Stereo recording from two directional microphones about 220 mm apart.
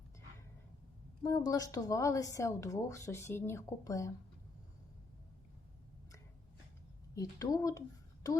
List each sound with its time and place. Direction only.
1.2 s speech: 15° left (ahead or behind)
7.2 s a woman's voice: 15° left (ahead or behind)